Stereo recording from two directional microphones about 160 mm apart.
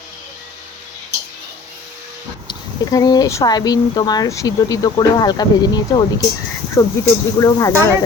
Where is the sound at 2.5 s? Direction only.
25° left (ahead or behind).